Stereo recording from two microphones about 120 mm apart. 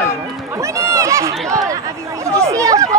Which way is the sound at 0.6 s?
25° right (ahead or behind).